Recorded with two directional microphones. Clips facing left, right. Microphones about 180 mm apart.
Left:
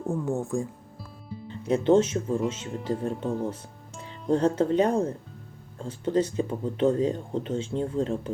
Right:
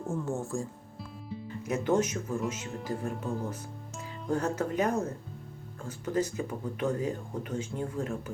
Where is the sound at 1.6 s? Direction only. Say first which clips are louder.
Left 7 dB; 30° left (ahead or behind).